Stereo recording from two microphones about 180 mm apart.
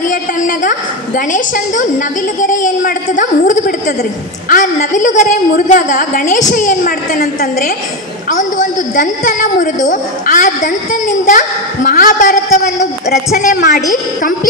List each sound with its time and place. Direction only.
0.1 s a woman's voice: 45° left (ahead or behind)